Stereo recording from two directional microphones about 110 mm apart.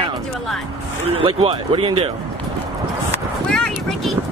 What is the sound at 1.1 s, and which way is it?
Speech, 55° right (ahead or behind).